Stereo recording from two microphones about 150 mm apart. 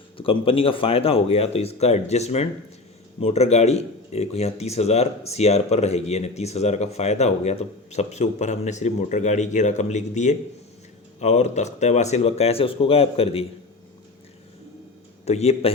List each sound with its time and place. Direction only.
0.2 s speech: 35° left (ahead or behind)
15.2 s speech: 45° left (ahead or behind)